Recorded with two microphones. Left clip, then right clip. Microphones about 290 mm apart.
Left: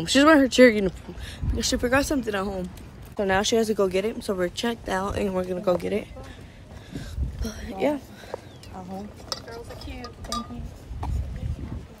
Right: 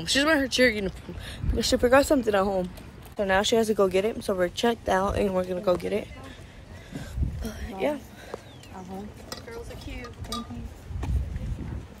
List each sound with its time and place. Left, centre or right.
0.0 s speech: left
1.2 s speech: centre
3.2 s speech: centre
6.9 s a sound: centre